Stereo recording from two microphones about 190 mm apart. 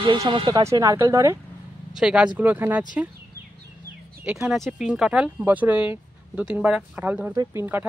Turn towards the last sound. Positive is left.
turn(degrees=-10)  # may be behind; listen again after turning